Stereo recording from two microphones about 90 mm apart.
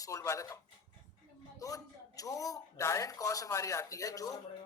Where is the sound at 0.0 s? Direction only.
35° left (ahead or behind).